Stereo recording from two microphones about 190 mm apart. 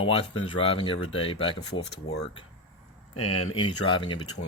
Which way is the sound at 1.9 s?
60° left (ahead or behind).